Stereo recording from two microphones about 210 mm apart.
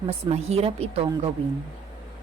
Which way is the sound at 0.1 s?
30° right (ahead or behind).